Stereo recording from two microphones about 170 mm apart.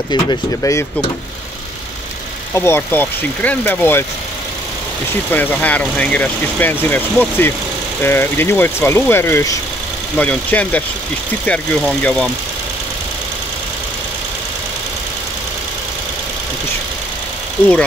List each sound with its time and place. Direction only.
0.1 s speech: 20° left (ahead or behind)
2.5 s speech: 15° left (ahead or behind)
5.3 s speech: 10° left (ahead or behind)